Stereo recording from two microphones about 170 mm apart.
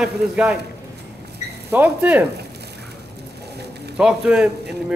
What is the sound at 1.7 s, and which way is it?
Speech, 10° right (ahead or behind).